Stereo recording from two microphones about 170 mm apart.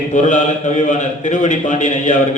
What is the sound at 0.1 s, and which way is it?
A man's voice, 45° left (ahead or behind).